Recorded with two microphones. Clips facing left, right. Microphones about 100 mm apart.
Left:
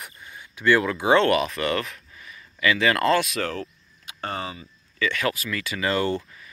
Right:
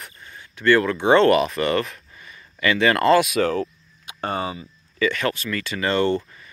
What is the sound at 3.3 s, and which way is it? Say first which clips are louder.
Cricket: right 8 dB; 15° right (ahead or behind).